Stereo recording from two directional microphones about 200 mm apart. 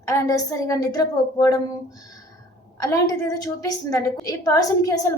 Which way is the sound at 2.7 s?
15° left (ahead or behind).